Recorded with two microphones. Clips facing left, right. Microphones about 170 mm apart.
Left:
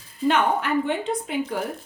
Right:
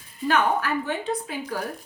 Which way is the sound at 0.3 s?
25° left (ahead or behind).